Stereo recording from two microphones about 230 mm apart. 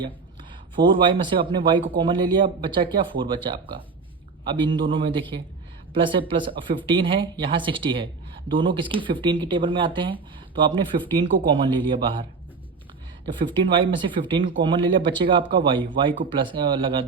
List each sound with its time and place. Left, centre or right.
0.8 s speech: right
13.6 s speech: right